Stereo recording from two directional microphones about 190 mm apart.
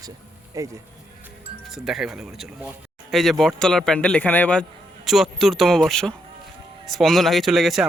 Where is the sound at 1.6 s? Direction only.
Centre (ahead or behind).